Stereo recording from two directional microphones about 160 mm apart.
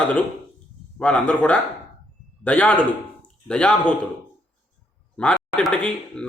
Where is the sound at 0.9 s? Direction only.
5° left (ahead or behind).